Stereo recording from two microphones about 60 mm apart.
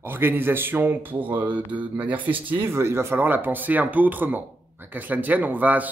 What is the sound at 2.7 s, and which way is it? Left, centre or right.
Speech, right.